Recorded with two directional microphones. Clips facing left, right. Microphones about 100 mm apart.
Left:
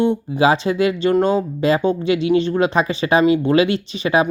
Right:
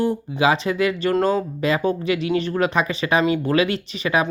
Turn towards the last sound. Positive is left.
turn(degrees=30)  # may be behind; listen again after turning